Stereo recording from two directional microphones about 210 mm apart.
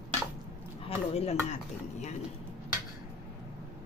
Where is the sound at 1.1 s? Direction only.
30° left (ahead or behind).